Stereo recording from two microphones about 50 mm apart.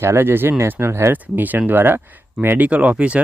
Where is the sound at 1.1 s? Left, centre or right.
Right.